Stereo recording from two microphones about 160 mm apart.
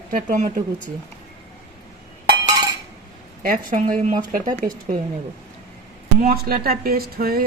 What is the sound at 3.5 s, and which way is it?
Speech, 50° right (ahead or behind).